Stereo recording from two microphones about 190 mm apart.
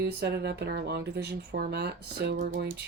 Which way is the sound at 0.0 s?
60° right (ahead or behind).